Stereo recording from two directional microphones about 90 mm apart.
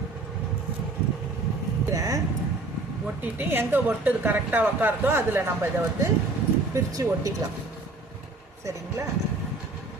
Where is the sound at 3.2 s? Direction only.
25° right (ahead or behind).